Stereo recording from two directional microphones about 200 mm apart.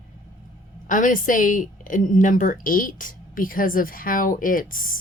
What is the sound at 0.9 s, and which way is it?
Speech, 40° left (ahead or behind).